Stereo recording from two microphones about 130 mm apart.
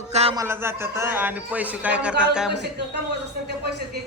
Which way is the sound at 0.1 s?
55° right (ahead or behind).